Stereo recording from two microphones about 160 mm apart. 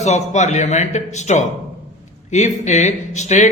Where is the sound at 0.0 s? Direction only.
45° left (ahead or behind).